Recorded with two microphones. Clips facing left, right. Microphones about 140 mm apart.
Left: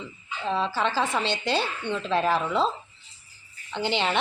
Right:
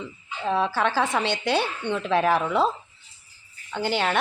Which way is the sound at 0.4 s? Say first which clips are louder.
Right 3 dB; 10° right (ahead or behind).